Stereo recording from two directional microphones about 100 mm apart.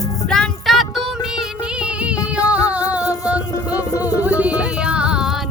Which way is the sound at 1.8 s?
10° right (ahead or behind).